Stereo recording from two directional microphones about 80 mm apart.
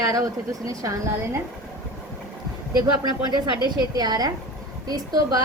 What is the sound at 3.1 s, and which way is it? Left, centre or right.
A woman's voice, right.